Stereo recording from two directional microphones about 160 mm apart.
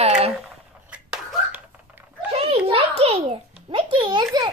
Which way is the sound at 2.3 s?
40° right (ahead or behind).